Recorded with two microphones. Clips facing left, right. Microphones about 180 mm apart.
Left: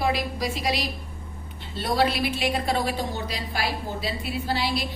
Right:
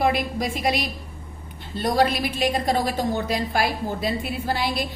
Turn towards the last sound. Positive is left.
turn(degrees=-50)  # may be behind; listen again after turning